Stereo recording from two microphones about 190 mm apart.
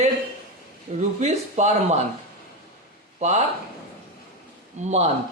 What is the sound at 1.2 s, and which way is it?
Speech, 35° right (ahead or behind).